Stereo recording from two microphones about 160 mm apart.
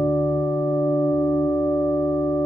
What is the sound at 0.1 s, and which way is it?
Sine wave, 15° left (ahead or behind).